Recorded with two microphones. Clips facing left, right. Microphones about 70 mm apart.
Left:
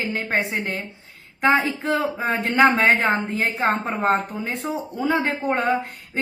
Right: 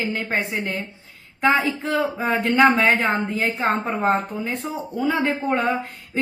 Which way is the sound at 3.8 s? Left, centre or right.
Left.